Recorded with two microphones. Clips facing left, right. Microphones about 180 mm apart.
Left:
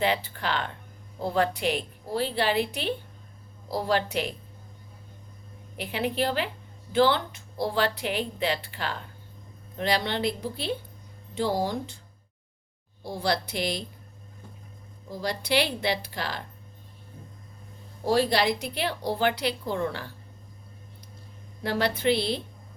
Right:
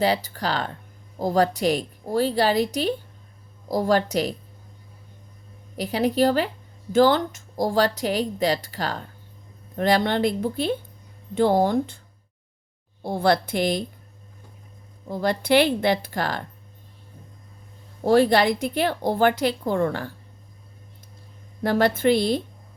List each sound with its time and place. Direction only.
0.0 s a woman's voice: 40° right (ahead or behind)
5.7 s a woman's voice: 40° right (ahead or behind); by 11.9 s 55° right (ahead or behind)
13.0 s a woman's voice: 55° right (ahead or behind)
15.0 s a woman's voice: 55° right (ahead or behind)
18.0 s a woman's voice: 55° right (ahead or behind)
21.6 s a woman's voice: 50° right (ahead or behind)